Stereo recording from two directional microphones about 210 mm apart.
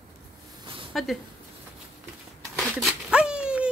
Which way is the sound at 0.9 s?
Centre (ahead or behind).